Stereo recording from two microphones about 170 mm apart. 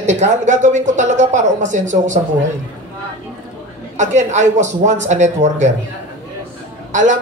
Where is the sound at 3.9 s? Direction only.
45° right (ahead or behind).